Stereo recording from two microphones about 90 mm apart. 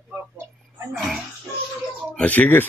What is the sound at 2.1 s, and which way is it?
Speech, 15° left (ahead or behind).